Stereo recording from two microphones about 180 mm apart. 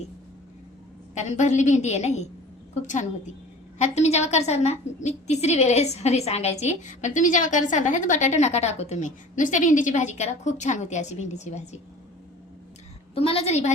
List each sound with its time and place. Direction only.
1.1 s a woman's voice: 40° left (ahead or behind)
13.1 s a woman's voice: 30° left (ahead or behind)